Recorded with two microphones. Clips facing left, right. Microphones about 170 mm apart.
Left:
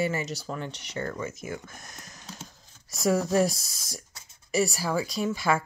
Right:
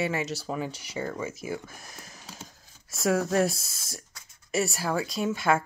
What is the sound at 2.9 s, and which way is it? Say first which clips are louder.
Speech: left 1 dB; centre (ahead or behind).